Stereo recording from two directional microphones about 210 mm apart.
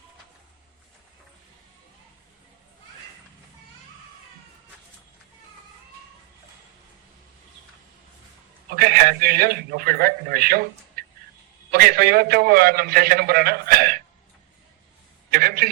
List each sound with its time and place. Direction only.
8.7 s a man's voice: 45° right (ahead or behind)
11.7 s a man's voice: 45° right (ahead or behind)
15.3 s a sound: 45° right (ahead or behind)